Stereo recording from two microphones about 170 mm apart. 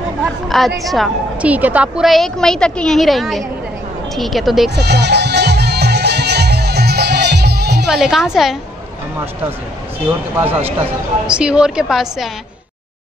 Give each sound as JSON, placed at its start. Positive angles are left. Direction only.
{"t": 0.2, "sound": "chatter", "side_deg": 0}
{"t": 0.8, "sound": "a woman's voice", "side_deg": 0}
{"t": 4.7, "sound": "music", "side_deg": -80}
{"t": 7.8, "sound": "a woman's voice", "side_deg": 0}
{"t": 10.0, "sound": "a woman's voice", "side_deg": -10}